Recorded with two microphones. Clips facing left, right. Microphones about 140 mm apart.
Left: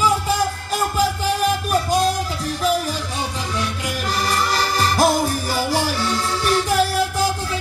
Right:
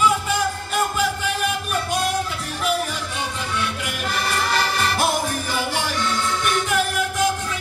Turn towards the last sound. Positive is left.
turn(degrees=35)  # may be behind; listen again after turning